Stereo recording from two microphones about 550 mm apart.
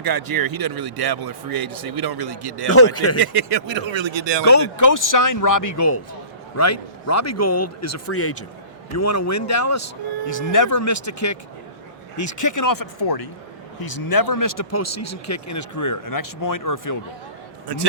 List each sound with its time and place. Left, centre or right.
0.0 s speech: right
2.6 s a man's voice: left
3.2 s speech: right
4.4 s a man's voice: left
17.7 s speech: right